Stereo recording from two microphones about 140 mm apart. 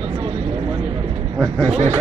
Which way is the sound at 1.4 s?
Centre (ahead or behind).